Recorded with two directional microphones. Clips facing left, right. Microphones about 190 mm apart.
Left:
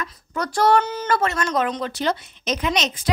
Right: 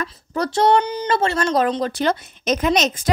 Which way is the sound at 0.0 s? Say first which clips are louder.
Right 4 dB; 35° right (ahead or behind).